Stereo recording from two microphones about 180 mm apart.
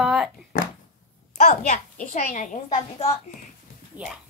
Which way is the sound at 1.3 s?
40° left (ahead or behind).